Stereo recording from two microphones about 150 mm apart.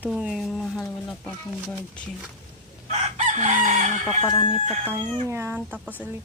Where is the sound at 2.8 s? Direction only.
50° right (ahead or behind).